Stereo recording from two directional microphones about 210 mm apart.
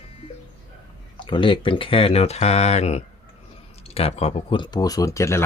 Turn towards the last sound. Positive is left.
turn(degrees=15)  # may be behind; listen again after turning